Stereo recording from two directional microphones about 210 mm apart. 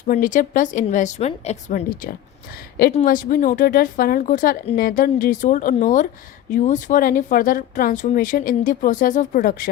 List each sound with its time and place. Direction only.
0.1 s a woman's voice: 40° left (ahead or behind)